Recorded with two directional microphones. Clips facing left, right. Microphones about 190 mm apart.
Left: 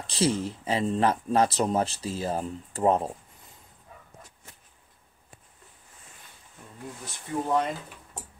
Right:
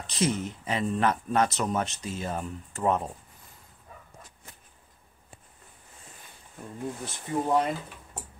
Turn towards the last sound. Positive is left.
turn(degrees=-10)  # may be behind; listen again after turning